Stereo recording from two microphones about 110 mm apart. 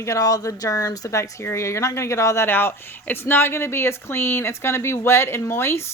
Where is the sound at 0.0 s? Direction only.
30° left (ahead or behind).